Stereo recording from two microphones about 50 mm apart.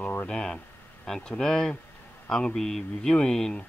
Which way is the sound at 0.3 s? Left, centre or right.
Centre.